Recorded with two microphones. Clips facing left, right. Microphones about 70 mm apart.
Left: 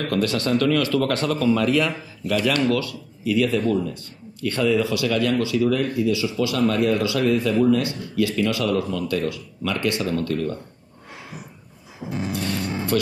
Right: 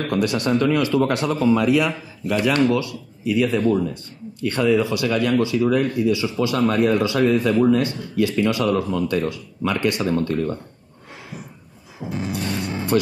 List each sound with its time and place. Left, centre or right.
0.1 s a man's voice: centre
2.3 s speech: right
12.0 s a sound: centre
12.9 s speech: right